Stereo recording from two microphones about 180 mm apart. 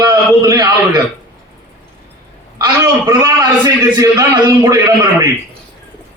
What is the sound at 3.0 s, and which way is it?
A man's voice, 15° right (ahead or behind).